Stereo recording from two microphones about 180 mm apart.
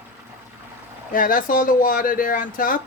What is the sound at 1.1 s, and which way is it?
A man's voice, 50° left (ahead or behind).